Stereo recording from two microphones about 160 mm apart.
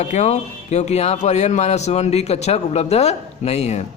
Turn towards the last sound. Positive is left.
turn(degrees=40)  # may be behind; listen again after turning